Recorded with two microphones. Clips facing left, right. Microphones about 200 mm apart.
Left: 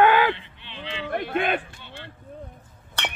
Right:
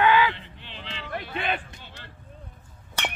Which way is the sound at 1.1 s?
50° left (ahead or behind).